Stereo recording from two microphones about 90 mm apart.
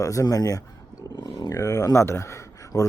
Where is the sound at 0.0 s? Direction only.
35° left (ahead or behind).